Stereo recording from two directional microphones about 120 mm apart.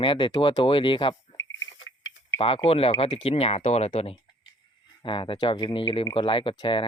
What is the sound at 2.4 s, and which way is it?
Speech, 50° left (ahead or behind).